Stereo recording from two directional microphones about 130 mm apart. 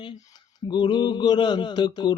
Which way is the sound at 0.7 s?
35° left (ahead or behind).